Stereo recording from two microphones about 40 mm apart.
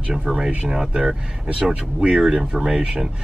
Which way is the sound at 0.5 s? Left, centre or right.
Right.